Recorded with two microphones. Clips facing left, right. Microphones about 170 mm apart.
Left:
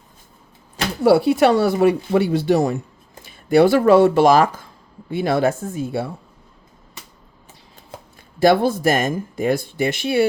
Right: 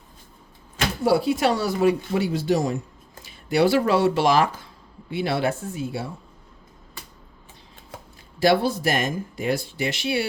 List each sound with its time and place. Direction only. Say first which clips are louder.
1.0 s speech: left 6 dB; 65° left (ahead or behind)
8.4 s speech: left 4 dB; 50° left (ahead or behind)